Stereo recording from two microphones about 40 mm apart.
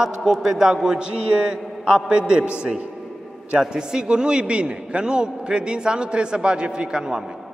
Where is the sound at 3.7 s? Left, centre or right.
Centre.